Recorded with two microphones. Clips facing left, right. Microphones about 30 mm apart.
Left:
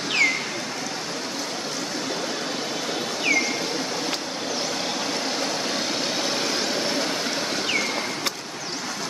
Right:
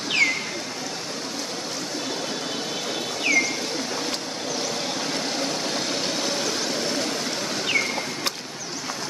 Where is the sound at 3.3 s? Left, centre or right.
Centre.